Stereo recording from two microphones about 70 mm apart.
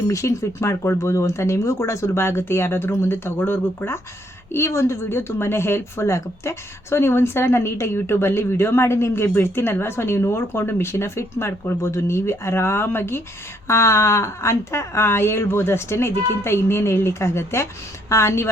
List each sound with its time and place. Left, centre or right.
0.1 s speech: left